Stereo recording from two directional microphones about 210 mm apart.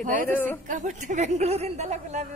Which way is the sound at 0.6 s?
35° right (ahead or behind).